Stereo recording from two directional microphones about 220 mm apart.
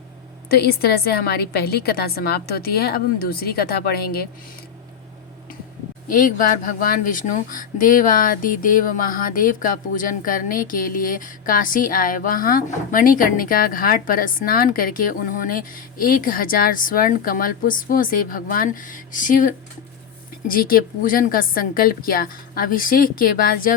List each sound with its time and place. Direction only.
0.5 s a woman's voice: 45° left (ahead or behind)
6.1 s speech: 40° left (ahead or behind)